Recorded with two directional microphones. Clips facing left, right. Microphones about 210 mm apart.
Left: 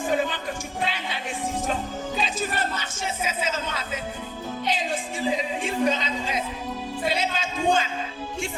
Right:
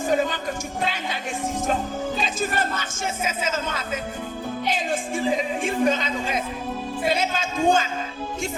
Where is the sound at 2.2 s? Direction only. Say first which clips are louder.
Left 1 dB; 45° right (ahead or behind).